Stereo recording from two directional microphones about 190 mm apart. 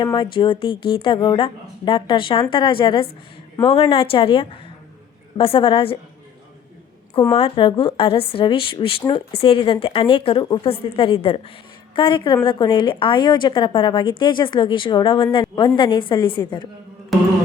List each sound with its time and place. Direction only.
0.0 s a woman's voice: 25° left (ahead or behind)
7.1 s a woman's voice: 25° left (ahead or behind)